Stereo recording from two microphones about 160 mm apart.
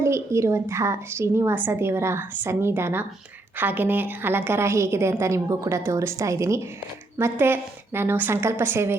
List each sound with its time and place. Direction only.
0.0 s a woman's voice: 15° right (ahead or behind)